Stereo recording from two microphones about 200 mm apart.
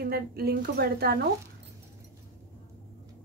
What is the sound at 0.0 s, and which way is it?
A woman's voice, 50° right (ahead or behind).